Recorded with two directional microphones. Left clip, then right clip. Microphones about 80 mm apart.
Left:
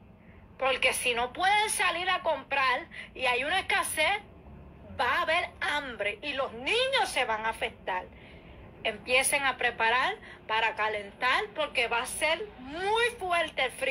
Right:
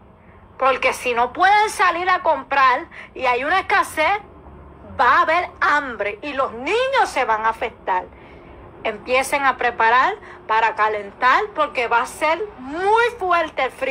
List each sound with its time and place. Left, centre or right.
0.6 s a woman's voice: right